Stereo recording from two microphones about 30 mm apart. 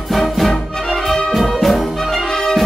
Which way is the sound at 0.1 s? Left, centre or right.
Centre.